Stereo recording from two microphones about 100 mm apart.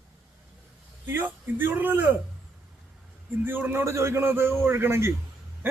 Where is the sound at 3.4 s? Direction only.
20° right (ahead or behind).